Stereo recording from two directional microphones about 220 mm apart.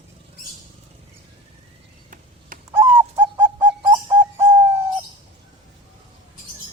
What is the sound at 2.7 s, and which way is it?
Bird, 10° right (ahead or behind).